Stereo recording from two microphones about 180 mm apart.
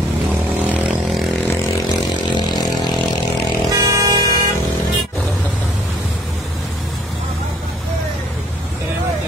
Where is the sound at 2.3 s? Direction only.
25° left (ahead or behind).